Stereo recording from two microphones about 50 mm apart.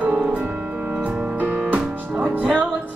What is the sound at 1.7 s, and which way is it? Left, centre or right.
Music, right.